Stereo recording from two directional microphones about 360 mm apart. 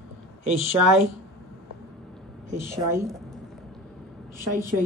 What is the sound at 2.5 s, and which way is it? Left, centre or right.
Speech, centre.